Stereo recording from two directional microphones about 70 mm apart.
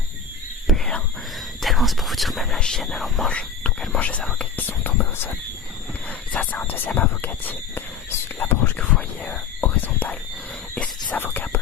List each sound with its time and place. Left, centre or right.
0.7 s whispering: centre
1.6 s speech: centre
2.6 s speech: centre
3.2 s speech: centre
11.1 s whispering: left